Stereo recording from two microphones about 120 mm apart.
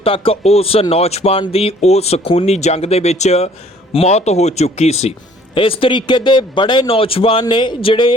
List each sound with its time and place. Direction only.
0.0 s speech: 50° left (ahead or behind)
5.5 s a man's voice: 50° left (ahead or behind)
7.4 s speech: 40° left (ahead or behind)